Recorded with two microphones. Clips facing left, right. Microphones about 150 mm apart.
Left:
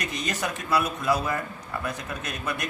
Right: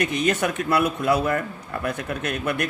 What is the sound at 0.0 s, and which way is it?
A man's voice, 60° right (ahead or behind).